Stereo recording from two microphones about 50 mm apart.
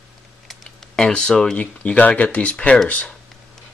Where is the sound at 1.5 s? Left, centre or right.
Left.